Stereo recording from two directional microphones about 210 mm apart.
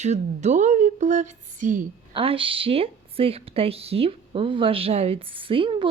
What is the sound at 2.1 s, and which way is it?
Speech, 25° right (ahead or behind).